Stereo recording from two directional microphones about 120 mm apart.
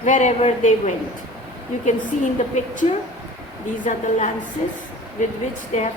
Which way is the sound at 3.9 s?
90° left.